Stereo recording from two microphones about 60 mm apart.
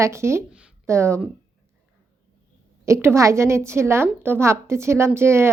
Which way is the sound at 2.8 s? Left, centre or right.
Right.